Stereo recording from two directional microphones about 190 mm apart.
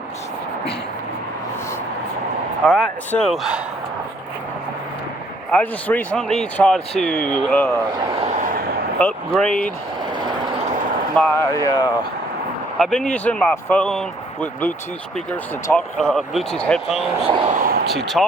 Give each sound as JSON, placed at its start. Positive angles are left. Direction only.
{"t": 2.6, "sound": "a man's voice", "side_deg": 0}
{"t": 5.5, "sound": "speech", "side_deg": 10}
{"t": 7.9, "sound": "speech", "side_deg": -25}
{"t": 8.4, "sound": "a sound", "side_deg": -45}
{"t": 9.0, "sound": "speech", "side_deg": 5}
{"t": 11.2, "sound": "speech", "side_deg": 10}
{"t": 11.6, "sound": "speech", "side_deg": 20}
{"t": 12.8, "sound": "a man's voice", "side_deg": 5}
{"t": 15.7, "sound": "a man's voice", "side_deg": 5}
{"t": 17.2, "sound": "vehicle", "side_deg": -30}
{"t": 17.9, "sound": "a man's voice", "side_deg": 0}